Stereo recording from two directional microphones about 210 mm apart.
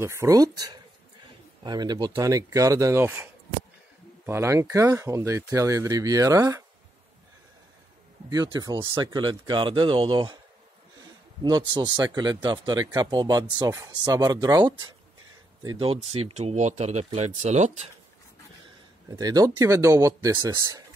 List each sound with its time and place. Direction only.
0.0 s speech: 10° right (ahead or behind)
4.3 s speech: 15° right (ahead or behind)
8.3 s speech: 20° right (ahead or behind)
11.4 s speech: 20° right (ahead or behind)
16.1 s speech: 90° right
16.3 s speech: 35° right (ahead or behind)
19.1 s speech: 20° right (ahead or behind)